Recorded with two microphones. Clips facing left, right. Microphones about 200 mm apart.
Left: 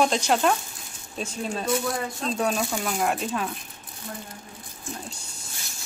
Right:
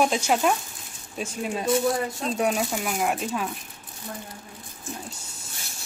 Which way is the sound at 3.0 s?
5° right (ahead or behind).